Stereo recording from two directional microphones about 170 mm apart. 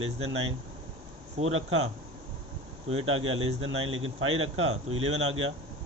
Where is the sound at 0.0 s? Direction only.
35° right (ahead or behind).